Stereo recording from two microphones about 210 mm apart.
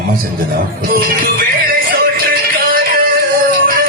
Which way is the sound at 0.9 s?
45° right (ahead or behind).